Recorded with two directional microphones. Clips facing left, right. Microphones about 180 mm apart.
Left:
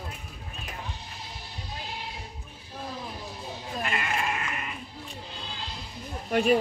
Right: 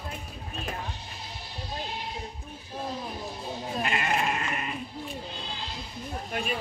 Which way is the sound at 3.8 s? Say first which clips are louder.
Right 2 dB; 35° right (ahead or behind).